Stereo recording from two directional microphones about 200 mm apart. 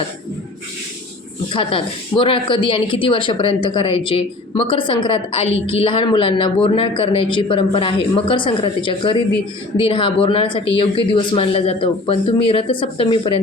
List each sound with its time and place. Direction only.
1.5 s a woman's voice: 25° left (ahead or behind)